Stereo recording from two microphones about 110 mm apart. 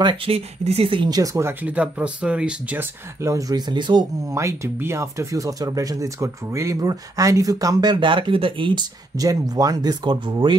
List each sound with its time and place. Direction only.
0.0 s speech: 50° right (ahead or behind)
0.7 s speech: 60° right (ahead or behind)
1.1 s speech: 30° right (ahead or behind)
1.6 s speech: 10° right (ahead or behind)
3.3 s speech: 30° right (ahead or behind)
4.3 s speech: 25° right (ahead or behind); by 8.8 s 50° right (ahead or behind)
9.2 s speech: 35° right (ahead or behind)